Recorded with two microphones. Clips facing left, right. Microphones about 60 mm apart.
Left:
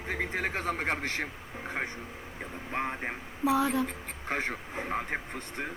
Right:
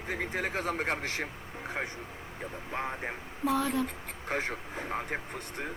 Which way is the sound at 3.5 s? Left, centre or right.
Centre.